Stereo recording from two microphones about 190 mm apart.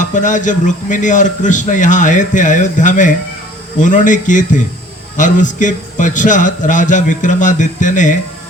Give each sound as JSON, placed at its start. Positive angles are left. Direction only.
{"t": 0.0, "sound": "a man's voice", "side_deg": 40}